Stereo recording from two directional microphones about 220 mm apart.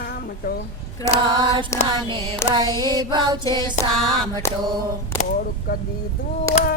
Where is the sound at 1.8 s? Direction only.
20° right (ahead or behind).